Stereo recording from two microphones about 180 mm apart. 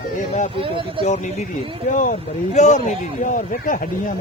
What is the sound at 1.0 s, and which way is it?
Speech, 40° left (ahead or behind).